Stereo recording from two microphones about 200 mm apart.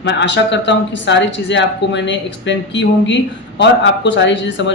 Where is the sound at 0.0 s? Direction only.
60° left (ahead or behind).